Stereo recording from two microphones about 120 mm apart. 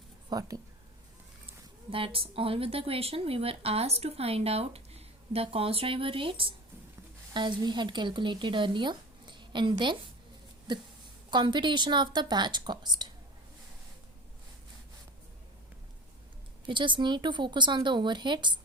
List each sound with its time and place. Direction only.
0.3 s speech: 30° right (ahead or behind)
1.9 s a woman's voice: 50° right (ahead or behind)
16.6 s speech: 40° right (ahead or behind)